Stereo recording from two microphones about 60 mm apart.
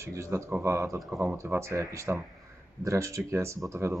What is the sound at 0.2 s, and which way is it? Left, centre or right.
Speech, right.